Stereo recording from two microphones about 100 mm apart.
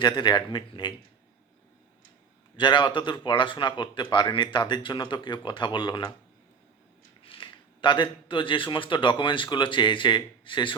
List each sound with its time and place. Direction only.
0.0 s speech: 50° left (ahead or behind)
2.6 s speech: 50° left (ahead or behind)
7.2 s speech: 60° left (ahead or behind)